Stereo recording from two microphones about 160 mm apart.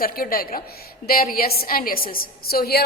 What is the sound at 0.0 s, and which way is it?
A woman's voice, 65° left (ahead or behind).